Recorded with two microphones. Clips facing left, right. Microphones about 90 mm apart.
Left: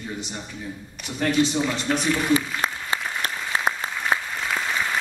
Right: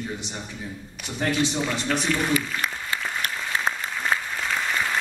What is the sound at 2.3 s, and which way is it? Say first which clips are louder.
Applause: left 3 dB; 25° left (ahead or behind).